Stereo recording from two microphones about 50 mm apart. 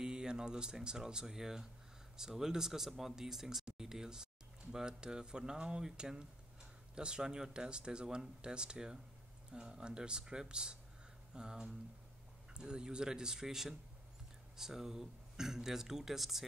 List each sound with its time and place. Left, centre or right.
0.0 s speech: centre